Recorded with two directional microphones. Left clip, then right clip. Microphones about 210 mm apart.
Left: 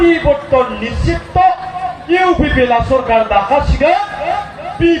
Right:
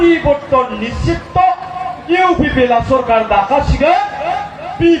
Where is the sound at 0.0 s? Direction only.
15° right (ahead or behind).